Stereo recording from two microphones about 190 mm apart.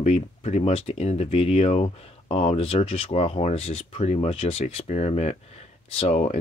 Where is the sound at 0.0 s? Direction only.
35° left (ahead or behind).